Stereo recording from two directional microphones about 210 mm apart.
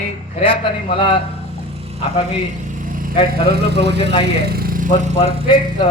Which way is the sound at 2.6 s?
40° right (ahead or behind).